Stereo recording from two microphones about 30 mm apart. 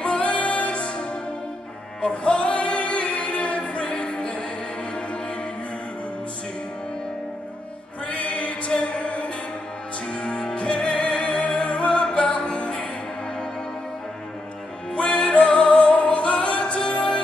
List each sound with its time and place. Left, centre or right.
0.0 s music: left
2.0 s music: left
8.1 s music: left
11.9 s music: left
12.2 s music: left
15.0 s music: left
15.3 s music: left